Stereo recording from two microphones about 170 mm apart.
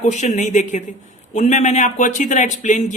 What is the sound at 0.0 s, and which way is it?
Speech, 45° left (ahead or behind).